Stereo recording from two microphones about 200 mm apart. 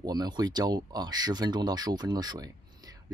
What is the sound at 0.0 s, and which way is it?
Speech, 20° right (ahead or behind).